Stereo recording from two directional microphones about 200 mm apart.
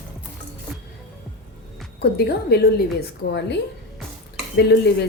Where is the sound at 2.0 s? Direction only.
55° left (ahead or behind).